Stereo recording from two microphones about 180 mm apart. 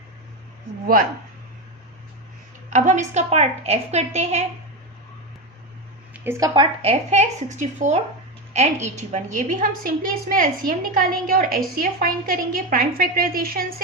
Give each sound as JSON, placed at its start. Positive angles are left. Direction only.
{"t": 2.6, "sound": "a woman's voice", "side_deg": -45}
{"t": 6.2, "sound": "speech", "side_deg": -15}
{"t": 6.5, "sound": "a woman's voice", "side_deg": -30}